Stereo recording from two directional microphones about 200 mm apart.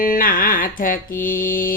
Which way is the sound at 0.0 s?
45° left (ahead or behind).